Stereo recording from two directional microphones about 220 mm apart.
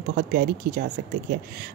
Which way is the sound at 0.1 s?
40° right (ahead or behind).